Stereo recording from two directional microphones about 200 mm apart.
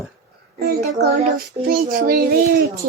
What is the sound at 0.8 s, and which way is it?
Child singing, 50° right (ahead or behind).